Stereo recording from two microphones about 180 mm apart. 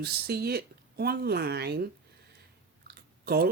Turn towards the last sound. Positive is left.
turn(degrees=-60)  # may be behind; listen again after turning